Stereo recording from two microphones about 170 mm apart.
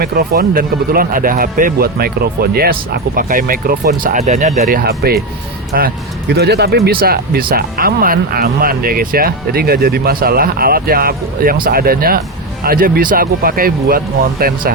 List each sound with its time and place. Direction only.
0.0 s speech: 60° right (ahead or behind)